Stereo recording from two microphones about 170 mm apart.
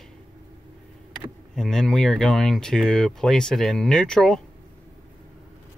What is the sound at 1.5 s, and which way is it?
Speech, 5° left (ahead or behind).